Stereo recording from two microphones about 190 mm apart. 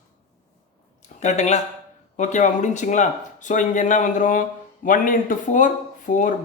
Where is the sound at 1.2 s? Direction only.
35° left (ahead or behind).